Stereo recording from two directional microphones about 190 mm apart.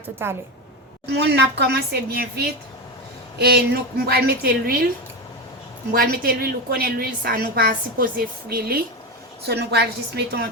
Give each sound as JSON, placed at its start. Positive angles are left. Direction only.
{"t": 0.2, "sound": "a woman's voice", "side_deg": -15}
{"t": 1.0, "sound": "a woman's voice", "side_deg": -60}
{"t": 5.9, "sound": "a woman's voice", "side_deg": -50}